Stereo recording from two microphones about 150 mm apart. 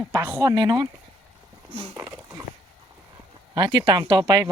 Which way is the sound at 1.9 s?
15° right (ahead or behind).